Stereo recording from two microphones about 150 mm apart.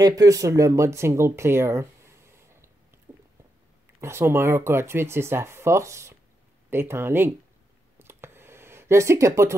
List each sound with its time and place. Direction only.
0.0 s speech: 25° right (ahead or behind)
4.0 s speech: 15° right (ahead or behind)
8.0 s a sound: 15° right (ahead or behind)